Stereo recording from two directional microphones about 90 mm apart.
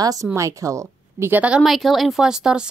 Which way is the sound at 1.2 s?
20° right (ahead or behind).